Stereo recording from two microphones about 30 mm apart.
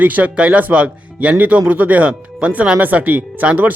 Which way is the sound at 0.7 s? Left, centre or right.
Right.